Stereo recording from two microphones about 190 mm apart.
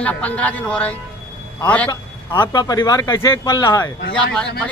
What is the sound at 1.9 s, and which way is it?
Speech, 20° left (ahead or behind).